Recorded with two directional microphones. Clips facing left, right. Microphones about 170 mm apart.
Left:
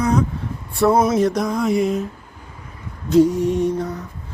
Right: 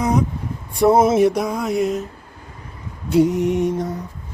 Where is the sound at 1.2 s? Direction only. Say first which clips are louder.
Right 1 dB; 10° right (ahead or behind).